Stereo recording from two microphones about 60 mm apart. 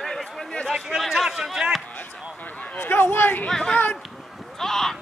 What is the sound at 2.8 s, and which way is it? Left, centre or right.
Speech, left.